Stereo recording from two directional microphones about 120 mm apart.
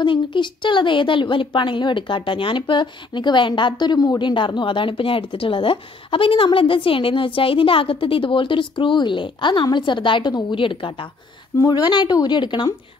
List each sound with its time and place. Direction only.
0.0 s a woman's voice: 40° left (ahead or behind)